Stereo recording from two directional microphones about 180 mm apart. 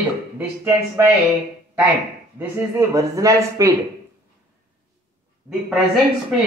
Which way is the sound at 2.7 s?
15° right (ahead or behind).